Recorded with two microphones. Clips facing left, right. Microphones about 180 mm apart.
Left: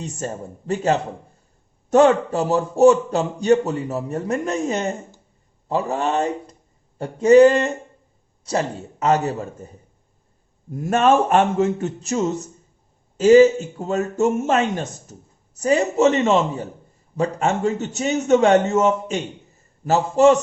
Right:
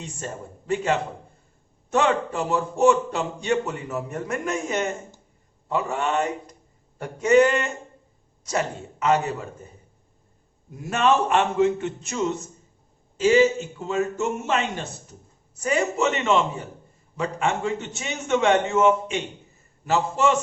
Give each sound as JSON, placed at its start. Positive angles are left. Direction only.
{"t": 0.2, "sound": "a man's voice", "side_deg": 40}
{"t": 1.9, "sound": "a man's voice", "side_deg": 40}
{"t": 10.7, "sound": "a man's voice", "side_deg": 50}